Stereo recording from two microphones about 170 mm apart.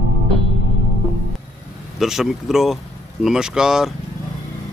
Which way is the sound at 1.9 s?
Centre (ahead or behind).